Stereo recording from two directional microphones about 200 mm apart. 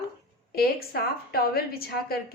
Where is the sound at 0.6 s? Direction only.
50° left (ahead or behind).